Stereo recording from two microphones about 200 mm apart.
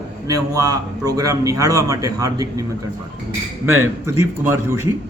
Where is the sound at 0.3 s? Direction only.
20° right (ahead or behind).